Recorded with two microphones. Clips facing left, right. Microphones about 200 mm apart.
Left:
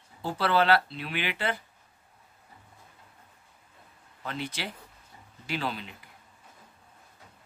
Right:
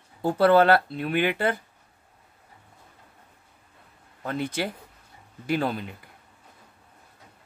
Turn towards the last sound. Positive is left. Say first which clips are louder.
# right 7 dB
turn(degrees=-50)  # may be behind; listen again after turning